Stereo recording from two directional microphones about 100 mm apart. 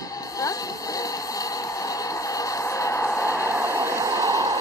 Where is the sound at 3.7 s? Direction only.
30° right (ahead or behind).